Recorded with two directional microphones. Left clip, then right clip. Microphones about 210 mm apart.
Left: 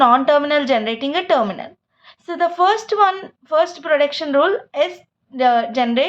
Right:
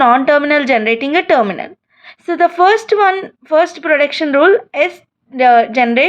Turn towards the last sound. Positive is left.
turn(degrees=-30)  # may be behind; listen again after turning